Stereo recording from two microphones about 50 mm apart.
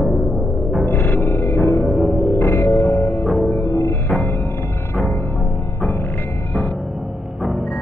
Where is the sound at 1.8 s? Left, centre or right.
Centre.